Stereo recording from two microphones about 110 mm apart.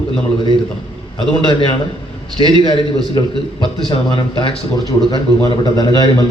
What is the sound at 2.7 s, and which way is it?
A man's voice, 50° left (ahead or behind).